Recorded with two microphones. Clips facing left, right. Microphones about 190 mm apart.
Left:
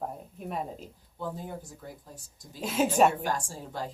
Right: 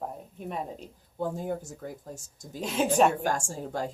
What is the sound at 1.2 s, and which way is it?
Speech, 45° right (ahead or behind).